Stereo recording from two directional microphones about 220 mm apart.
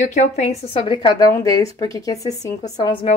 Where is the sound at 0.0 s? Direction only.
35° left (ahead or behind).